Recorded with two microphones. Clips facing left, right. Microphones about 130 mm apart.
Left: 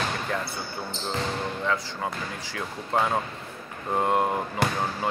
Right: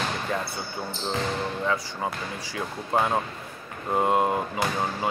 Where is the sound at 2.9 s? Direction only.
10° right (ahead or behind).